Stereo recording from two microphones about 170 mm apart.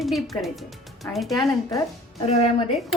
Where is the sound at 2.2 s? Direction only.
35° left (ahead or behind).